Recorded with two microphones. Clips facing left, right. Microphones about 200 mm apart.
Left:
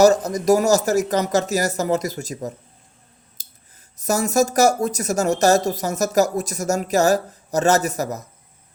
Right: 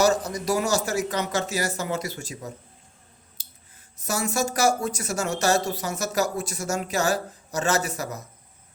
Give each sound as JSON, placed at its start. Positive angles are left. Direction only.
{"t": 0.0, "sound": "speech", "side_deg": 40}
{"t": 3.4, "sound": "scissors", "side_deg": 40}
{"t": 3.9, "sound": "speech", "side_deg": 40}